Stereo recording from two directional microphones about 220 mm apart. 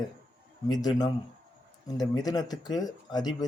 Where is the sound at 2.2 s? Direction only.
15° left (ahead or behind).